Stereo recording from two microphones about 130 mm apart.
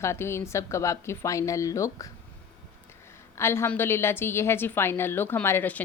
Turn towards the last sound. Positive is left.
turn(degrees=15)  # may be behind; listen again after turning